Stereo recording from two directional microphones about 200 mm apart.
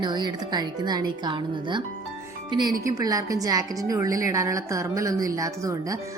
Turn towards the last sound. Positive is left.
turn(degrees=-15)  # may be behind; listen again after turning